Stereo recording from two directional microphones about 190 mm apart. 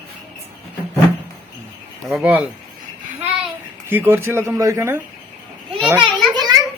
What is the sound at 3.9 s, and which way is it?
Speech, 10° right (ahead or behind).